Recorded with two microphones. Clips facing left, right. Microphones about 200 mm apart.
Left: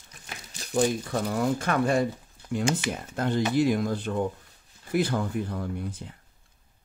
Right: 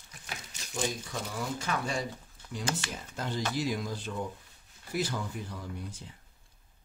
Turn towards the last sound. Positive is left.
turn(degrees=55)  # may be behind; listen again after turning